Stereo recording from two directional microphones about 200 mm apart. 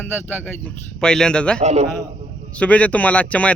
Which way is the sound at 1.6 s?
35° right (ahead or behind).